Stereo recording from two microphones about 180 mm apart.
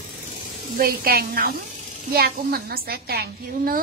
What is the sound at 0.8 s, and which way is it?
A woman's voice, 55° right (ahead or behind).